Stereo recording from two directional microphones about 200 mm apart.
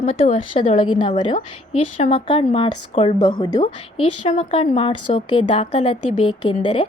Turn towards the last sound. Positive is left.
turn(degrees=25)  # may be behind; listen again after turning